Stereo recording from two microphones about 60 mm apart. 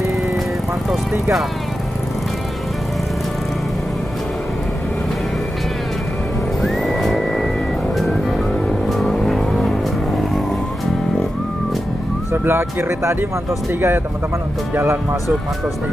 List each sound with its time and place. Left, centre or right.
6.6 s music: centre
8.8 s vehicle: centre
12.3 s speech: right